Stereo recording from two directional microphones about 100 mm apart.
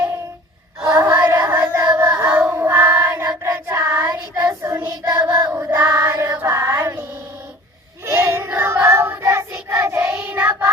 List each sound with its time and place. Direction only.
0.8 s female singing: 30° right (ahead or behind)
1.0 s child singing: 20° right (ahead or behind)
1.4 s a sound: 30° right (ahead or behind)
1.7 s child singing: 35° right (ahead or behind)
2.0 s music: 25° right (ahead or behind)
2.5 s child singing: 25° right (ahead or behind)
8.0 s child singing: 30° right (ahead or behind)